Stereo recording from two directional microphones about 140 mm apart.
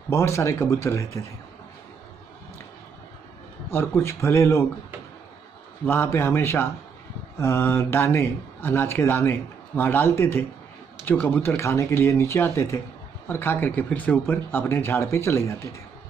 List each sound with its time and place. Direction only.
0.1 s speech: 20° left (ahead or behind)
3.7 s speech: 15° left (ahead or behind)
5.9 s speech: 20° left (ahead or behind)